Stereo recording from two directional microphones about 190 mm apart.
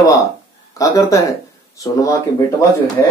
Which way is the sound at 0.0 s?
15° left (ahead or behind).